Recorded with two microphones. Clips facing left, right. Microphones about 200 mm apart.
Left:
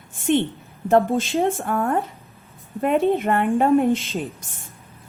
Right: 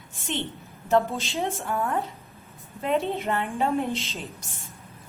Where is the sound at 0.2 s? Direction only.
50° left (ahead or behind).